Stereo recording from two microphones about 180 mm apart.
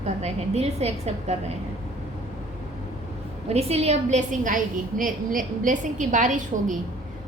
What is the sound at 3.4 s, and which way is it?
A woman's voice, 35° right (ahead or behind).